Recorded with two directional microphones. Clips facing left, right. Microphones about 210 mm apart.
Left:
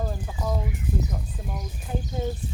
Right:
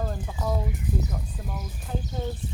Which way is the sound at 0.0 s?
Centre (ahead or behind).